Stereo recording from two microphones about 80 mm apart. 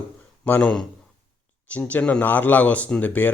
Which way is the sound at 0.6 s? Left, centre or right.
Centre.